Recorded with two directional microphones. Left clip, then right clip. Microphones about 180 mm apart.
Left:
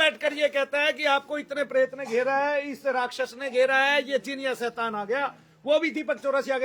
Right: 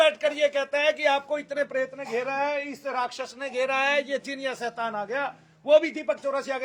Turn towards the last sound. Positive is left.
turn(degrees=20)  # may be behind; listen again after turning